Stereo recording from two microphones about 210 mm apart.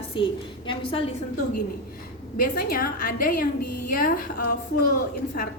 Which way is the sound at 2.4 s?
45° left (ahead or behind).